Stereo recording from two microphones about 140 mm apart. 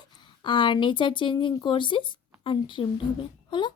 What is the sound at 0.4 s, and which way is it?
A woman's voice, 35° left (ahead or behind).